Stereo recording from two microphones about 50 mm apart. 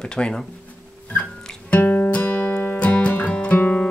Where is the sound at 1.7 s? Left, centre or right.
Left.